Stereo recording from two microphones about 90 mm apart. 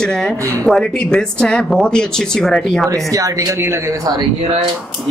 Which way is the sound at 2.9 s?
40° right (ahead or behind).